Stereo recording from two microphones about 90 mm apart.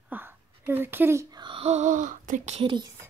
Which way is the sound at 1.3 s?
70° right (ahead or behind).